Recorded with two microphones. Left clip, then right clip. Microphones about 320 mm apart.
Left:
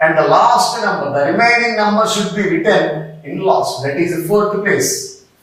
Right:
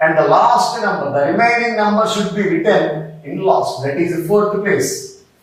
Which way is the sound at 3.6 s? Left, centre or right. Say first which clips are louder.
Left 1 dB; centre.